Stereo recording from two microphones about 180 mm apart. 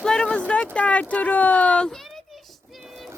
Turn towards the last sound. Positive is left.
turn(degrees=0)  # may be behind; listen again after turning